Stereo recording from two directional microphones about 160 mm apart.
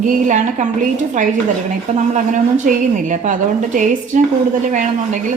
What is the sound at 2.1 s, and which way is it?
A woman's voice, 50° right (ahead or behind).